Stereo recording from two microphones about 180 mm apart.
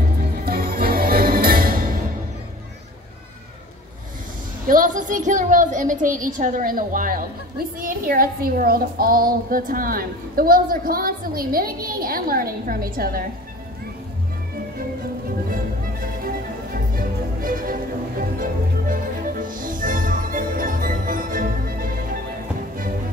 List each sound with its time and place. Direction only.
0.5 s music: 55° right (ahead or behind)
4.6 s a woman's voice: 45° right (ahead or behind)
16.7 s music: 50° right (ahead or behind)